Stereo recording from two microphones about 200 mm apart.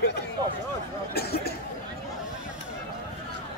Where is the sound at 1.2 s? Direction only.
50° left (ahead or behind).